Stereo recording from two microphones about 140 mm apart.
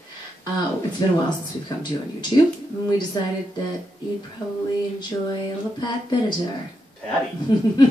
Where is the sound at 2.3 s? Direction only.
35° left (ahead or behind).